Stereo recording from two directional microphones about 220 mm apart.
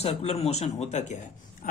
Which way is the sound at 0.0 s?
30° left (ahead or behind).